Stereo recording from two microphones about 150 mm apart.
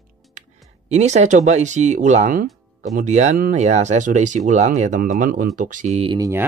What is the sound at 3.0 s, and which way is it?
Speech, 50° right (ahead or behind).